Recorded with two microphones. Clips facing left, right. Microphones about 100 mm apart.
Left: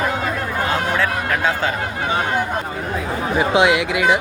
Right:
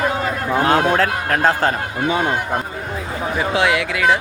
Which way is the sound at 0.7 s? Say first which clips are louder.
Right 5 dB; 55° right (ahead or behind).